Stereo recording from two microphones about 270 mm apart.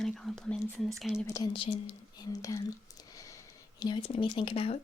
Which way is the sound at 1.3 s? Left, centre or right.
Centre.